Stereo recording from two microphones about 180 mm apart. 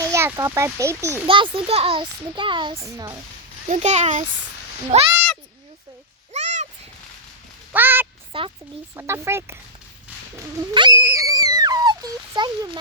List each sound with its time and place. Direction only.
0.0 s a child's voice: 15° right (ahead or behind)
1.3 s a child's voice: 30° right (ahead or behind)
2.7 s a child's voice: 15° right (ahead or behind)
3.7 s a child's voice: 40° right (ahead or behind)
6.3 s a sound: 40° right (ahead or behind)
7.7 s a child's voice: 10° right (ahead or behind)
8.3 s speech: 30° right (ahead or behind)
9.0 s a child's voice: 15° right (ahead or behind)
10.3 s a sound: 20° right (ahead or behind)